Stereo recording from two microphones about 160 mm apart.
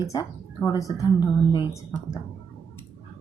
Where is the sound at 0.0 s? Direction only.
20° left (ahead or behind).